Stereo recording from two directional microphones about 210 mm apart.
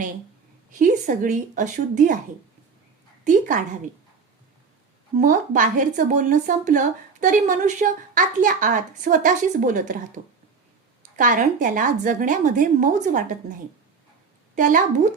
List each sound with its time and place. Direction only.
0.7 s speech: 40° right (ahead or behind)
3.2 s speech: 40° right (ahead or behind)
5.1 s speech: 40° right (ahead or behind)
11.2 s speech: 40° right (ahead or behind)
14.5 s speech: 35° right (ahead or behind)